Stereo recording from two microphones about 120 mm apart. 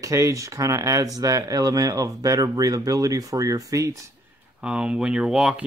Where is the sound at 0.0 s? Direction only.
25° right (ahead or behind).